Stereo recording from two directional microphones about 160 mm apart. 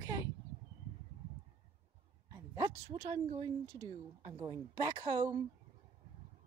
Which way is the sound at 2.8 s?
35° right (ahead or behind).